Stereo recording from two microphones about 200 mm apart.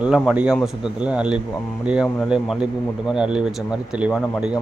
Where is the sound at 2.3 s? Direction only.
5° right (ahead or behind).